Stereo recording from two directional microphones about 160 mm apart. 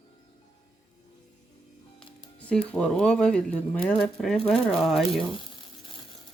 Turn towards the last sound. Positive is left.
turn(degrees=0)  # may be behind; listen again after turning